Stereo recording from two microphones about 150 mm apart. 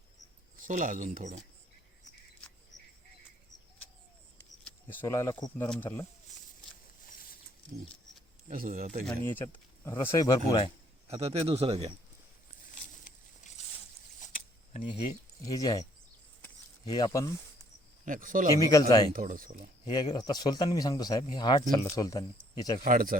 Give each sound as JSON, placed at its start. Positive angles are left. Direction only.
{"t": 0.5, "sound": "speech", "side_deg": -60}
{"t": 2.7, "sound": "cricket", "side_deg": 55}
{"t": 4.6, "sound": "speech", "side_deg": 10}
{"t": 8.4, "sound": "speech", "side_deg": -65}
{"t": 9.2, "sound": "speech", "side_deg": 15}
{"t": 11.1, "sound": "a man's voice", "side_deg": -45}
{"t": 13.6, "sound": "a sound", "side_deg": 50}
{"t": 15.4, "sound": "speech", "side_deg": 25}
{"t": 18.0, "sound": "speech", "side_deg": -60}
{"t": 18.5, "sound": "speech", "side_deg": 25}
{"t": 19.1, "sound": "speech", "side_deg": -65}
{"t": 19.8, "sound": "speech", "side_deg": 30}
{"t": 22.8, "sound": "speech", "side_deg": -70}